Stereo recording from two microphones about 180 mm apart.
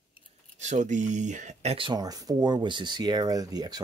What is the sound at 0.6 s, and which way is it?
Speech, 40° right (ahead or behind).